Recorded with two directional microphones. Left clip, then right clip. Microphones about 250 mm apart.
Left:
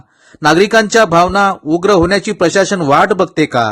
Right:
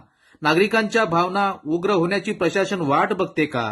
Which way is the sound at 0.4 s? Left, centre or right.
Left.